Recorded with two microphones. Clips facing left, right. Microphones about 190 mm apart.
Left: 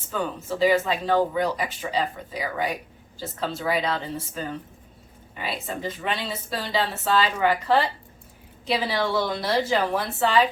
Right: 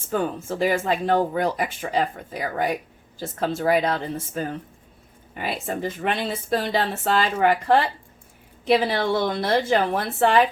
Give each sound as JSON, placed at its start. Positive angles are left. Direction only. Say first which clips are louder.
{"t": 0.1, "sound": "speech", "louder": "right 3 dB", "side_deg": -50}